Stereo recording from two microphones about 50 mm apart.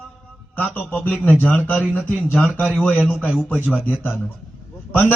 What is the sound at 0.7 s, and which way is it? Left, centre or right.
Speech, left.